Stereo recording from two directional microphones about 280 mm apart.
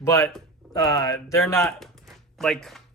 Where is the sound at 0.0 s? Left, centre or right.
Centre.